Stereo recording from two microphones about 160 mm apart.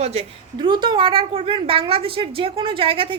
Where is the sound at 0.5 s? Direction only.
30° right (ahead or behind).